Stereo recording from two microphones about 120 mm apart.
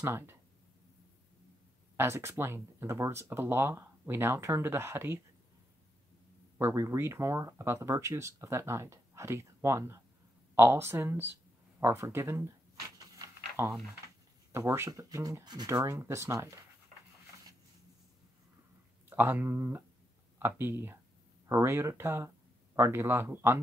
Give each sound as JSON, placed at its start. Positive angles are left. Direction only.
{"t": 0.0, "sound": "speech", "side_deg": -20}
{"t": 2.0, "sound": "speech", "side_deg": -20}
{"t": 6.6, "sound": "speech", "side_deg": -25}
{"t": 13.2, "sound": "a sound", "side_deg": -25}
{"t": 14.5, "sound": "speech", "side_deg": -25}
{"t": 19.0, "sound": "speech", "side_deg": -15}